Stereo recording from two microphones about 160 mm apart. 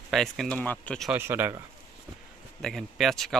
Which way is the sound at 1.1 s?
15° right (ahead or behind).